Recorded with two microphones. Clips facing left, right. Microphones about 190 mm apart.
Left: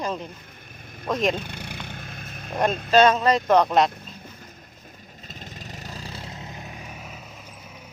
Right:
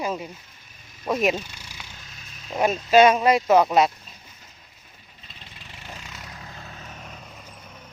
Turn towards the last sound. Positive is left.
turn(degrees=30)  # may be behind; listen again after turning